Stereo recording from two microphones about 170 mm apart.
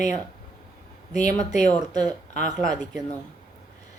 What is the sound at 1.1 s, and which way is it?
Speech, 45° left (ahead or behind).